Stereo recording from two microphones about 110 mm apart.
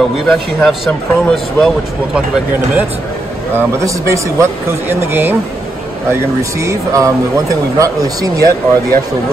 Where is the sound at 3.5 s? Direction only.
25° right (ahead or behind).